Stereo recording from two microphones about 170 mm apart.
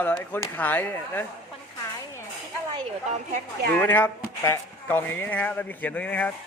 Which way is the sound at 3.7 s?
10° left (ahead or behind).